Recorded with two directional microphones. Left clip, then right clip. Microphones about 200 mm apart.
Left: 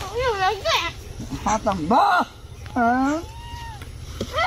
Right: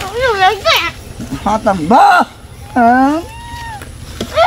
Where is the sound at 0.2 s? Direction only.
20° right (ahead or behind).